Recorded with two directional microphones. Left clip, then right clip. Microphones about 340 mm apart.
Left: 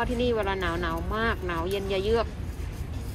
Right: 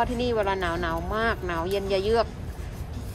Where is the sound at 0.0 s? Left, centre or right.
Centre.